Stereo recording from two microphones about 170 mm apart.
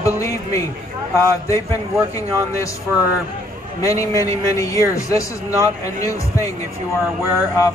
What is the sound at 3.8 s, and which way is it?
A man's voice, 20° left (ahead or behind).